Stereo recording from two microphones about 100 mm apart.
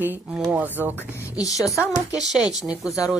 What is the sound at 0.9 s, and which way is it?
Speech, 25° left (ahead or behind).